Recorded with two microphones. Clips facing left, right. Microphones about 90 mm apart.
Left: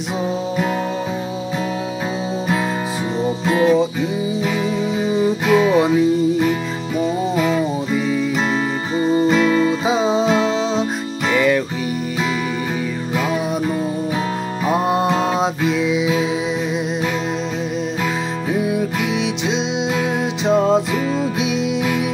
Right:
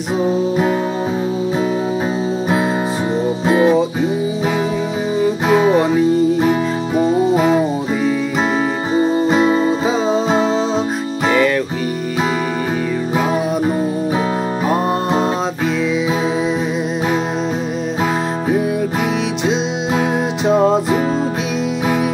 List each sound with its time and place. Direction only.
3.4 s music: 30° right (ahead or behind)
5.5 s music: 35° right (ahead or behind)
7.0 s music: 40° right (ahead or behind)
7.9 s music: 5° right (ahead or behind)
8.9 s music: 25° right (ahead or behind)
9.8 s music: 10° left (ahead or behind)
10.2 s music: 35° right (ahead or behind)
11.3 s music: 5° left (ahead or behind)
15.0 s music: 35° right (ahead or behind)
20.4 s music: 5° right (ahead or behind)